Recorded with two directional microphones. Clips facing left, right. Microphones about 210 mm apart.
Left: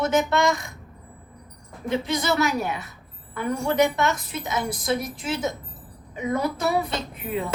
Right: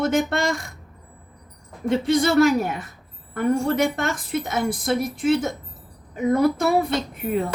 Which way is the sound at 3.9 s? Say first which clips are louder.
Even; 55° right (ahead or behind).